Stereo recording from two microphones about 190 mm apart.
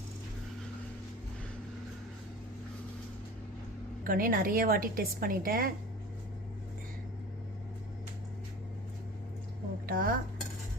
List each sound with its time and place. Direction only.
4.0 s a woman's voice: 50° right (ahead or behind)
9.8 s speech: 50° right (ahead or behind)